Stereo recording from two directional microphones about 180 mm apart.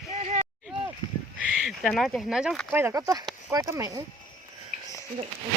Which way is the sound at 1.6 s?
Centre (ahead or behind).